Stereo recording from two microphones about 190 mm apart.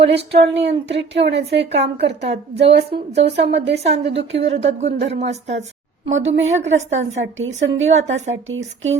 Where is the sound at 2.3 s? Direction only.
65° right (ahead or behind).